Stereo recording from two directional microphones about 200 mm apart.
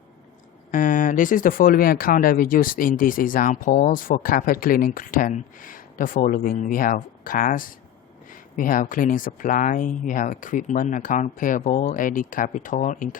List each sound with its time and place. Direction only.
0.7 s speech: 40° left (ahead or behind)